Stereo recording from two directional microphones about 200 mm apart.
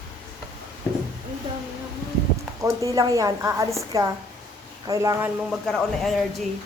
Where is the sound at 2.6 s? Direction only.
15° right (ahead or behind).